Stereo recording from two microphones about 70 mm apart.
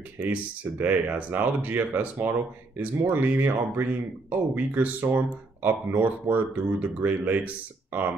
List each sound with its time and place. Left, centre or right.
0.3 s speech: right